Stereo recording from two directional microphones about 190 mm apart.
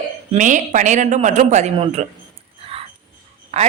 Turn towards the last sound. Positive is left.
turn(degrees=-35)  # may be behind; listen again after turning